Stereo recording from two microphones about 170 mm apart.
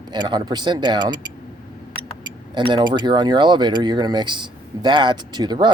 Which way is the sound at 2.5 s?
25° right (ahead or behind).